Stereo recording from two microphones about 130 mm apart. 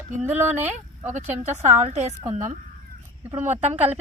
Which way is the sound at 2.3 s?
75° right (ahead or behind).